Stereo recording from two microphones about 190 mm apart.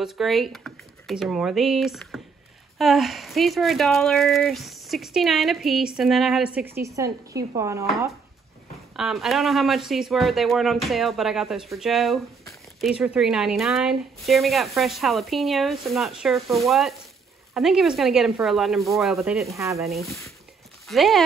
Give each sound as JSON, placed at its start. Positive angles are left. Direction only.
{"t": 0.0, "sound": "a woman's voice", "side_deg": 0}
{"t": 8.9, "sound": "speech", "side_deg": 0}
{"t": 19.4, "sound": "a woman's voice", "side_deg": -15}
{"t": 20.8, "sound": "speech", "side_deg": 0}